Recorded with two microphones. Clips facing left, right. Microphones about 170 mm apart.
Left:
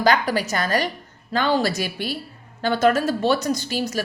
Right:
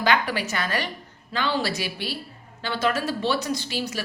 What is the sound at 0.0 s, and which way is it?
A woman's voice, 40° left (ahead or behind).